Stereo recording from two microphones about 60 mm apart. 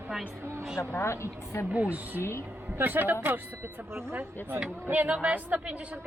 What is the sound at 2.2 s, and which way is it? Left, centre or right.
Speech, left.